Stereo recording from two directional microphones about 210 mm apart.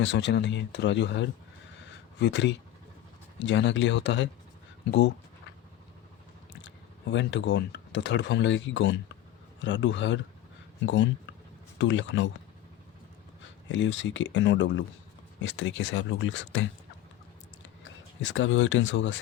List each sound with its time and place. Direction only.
0.0 s speech: 55° left (ahead or behind)
7.1 s speech: 60° left (ahead or behind)
13.7 s speech: 60° left (ahead or behind)
17.8 s speech: 65° left (ahead or behind)